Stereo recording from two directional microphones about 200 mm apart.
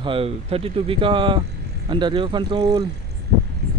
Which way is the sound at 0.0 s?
30° right (ahead or behind).